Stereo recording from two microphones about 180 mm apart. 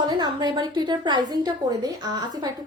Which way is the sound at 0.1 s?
25° right (ahead or behind).